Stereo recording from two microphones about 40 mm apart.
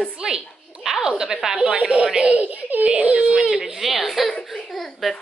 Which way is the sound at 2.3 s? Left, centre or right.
Right.